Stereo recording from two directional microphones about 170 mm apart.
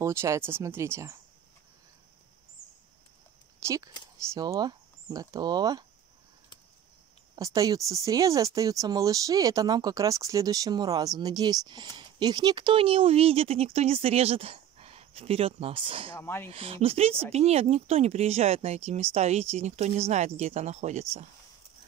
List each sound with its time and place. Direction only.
0.0 s speech: 15° right (ahead or behind)
3.6 s speech: 20° right (ahead or behind)
7.3 s speech: 20° right (ahead or behind)
16.2 s speech: 15° left (ahead or behind)
16.4 s speech: 35° right (ahead or behind)